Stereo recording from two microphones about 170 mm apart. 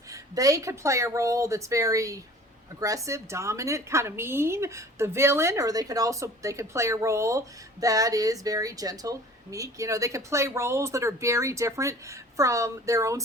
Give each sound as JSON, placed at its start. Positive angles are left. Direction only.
{"t": 0.1, "sound": "a woman's voice", "side_deg": -20}